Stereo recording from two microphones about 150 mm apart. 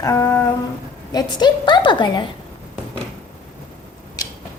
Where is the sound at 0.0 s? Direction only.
20° left (ahead or behind).